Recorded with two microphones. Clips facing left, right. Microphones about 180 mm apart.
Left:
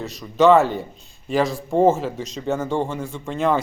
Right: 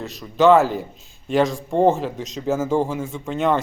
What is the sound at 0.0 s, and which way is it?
Speech, centre (ahead or behind).